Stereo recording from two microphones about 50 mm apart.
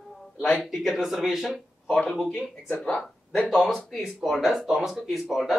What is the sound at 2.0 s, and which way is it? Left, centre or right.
Speech, centre.